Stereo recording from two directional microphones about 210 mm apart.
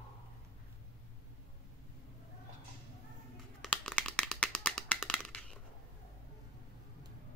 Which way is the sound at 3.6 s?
5° left (ahead or behind).